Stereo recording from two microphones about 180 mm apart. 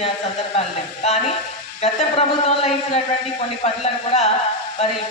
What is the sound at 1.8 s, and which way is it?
A man's voice, 35° left (ahead or behind).